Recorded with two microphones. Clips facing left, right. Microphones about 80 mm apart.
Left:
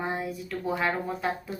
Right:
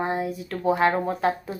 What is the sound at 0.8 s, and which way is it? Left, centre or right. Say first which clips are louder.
Speech: right 6 dB; right.